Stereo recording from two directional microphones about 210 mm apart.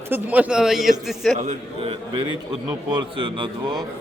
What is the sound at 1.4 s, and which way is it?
Speech, 30° right (ahead or behind).